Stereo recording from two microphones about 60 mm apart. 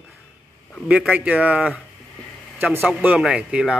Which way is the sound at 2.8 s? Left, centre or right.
Right.